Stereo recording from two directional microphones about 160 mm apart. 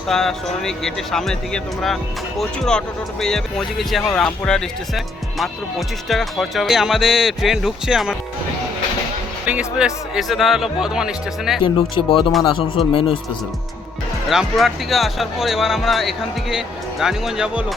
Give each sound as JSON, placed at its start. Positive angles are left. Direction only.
{"t": 0.1, "sound": "speech", "side_deg": 0}
{"t": 9.5, "sound": "speech", "side_deg": -5}
{"t": 11.6, "sound": "speech", "side_deg": 35}
{"t": 14.3, "sound": "speech", "side_deg": 0}